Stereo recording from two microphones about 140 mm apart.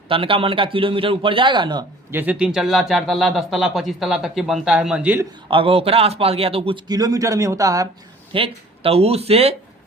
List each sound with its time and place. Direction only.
0.1 s a man's voice: 40° right (ahead or behind)
2.1 s speech: 10° right (ahead or behind)
5.5 s a man's voice: 40° right (ahead or behind)
6.9 s speech: 25° right (ahead or behind)
8.3 s a man's voice: 40° right (ahead or behind)